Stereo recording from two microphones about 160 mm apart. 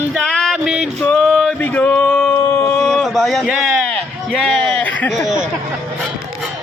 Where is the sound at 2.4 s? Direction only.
15° left (ahead or behind).